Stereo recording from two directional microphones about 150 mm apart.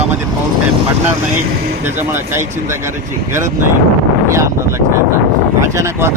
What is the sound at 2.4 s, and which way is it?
Speech, 55° right (ahead or behind).